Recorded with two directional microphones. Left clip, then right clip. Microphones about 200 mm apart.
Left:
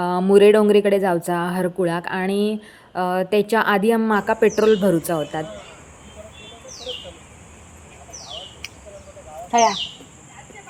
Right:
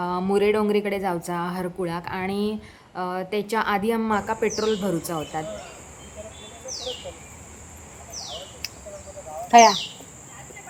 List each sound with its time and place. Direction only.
0.0 s speech: 15° left (ahead or behind)
9.5 s speech: 15° right (ahead or behind)